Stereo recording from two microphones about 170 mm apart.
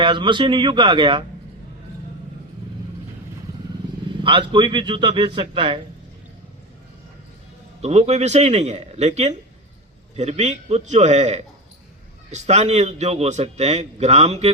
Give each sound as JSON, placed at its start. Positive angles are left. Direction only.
{"t": 0.0, "sound": "a man's voice", "side_deg": -30}
{"t": 4.2, "sound": "a man's voice", "side_deg": -30}
{"t": 7.8, "sound": "a man's voice", "side_deg": -40}